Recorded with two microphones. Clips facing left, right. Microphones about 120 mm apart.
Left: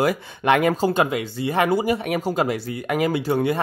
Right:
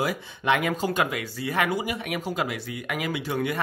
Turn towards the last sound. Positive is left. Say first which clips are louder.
# left 7 dB
turn(degrees=30)  # may be behind; listen again after turning